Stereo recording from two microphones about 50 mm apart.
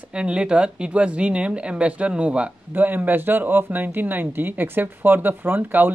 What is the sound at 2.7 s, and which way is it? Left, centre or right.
Speech, right.